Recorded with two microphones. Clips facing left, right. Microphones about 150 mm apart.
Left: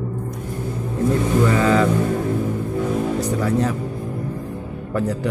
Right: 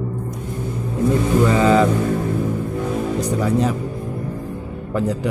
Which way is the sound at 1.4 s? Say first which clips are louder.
Right 3 dB; 15° right (ahead or behind).